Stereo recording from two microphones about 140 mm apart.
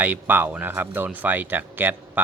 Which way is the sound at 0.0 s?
10° right (ahead or behind).